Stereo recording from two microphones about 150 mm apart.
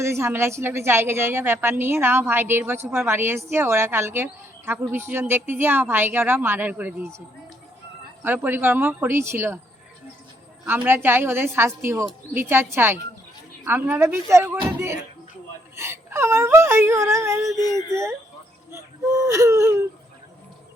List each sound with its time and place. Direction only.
0.0 s a woman's voice: 15° right (ahead or behind)
8.2 s a woman's voice: 15° right (ahead or behind)
10.8 s a woman's voice: 15° right (ahead or behind)
15.7 s wail: 15° right (ahead or behind)